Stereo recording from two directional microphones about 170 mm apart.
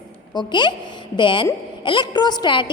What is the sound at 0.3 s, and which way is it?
A woman's voice, 25° left (ahead or behind).